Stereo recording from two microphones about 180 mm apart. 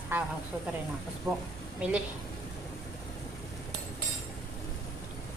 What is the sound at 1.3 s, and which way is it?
Speech, 15° right (ahead or behind).